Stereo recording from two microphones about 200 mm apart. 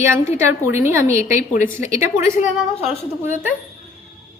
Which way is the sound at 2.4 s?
35° left (ahead or behind).